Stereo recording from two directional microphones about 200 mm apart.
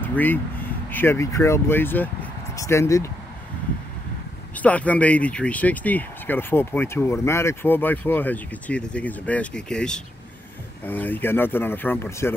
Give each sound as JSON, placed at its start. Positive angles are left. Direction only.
{"t": 0.0, "sound": "speech", "side_deg": 10}
{"t": 4.6, "sound": "speech", "side_deg": 5}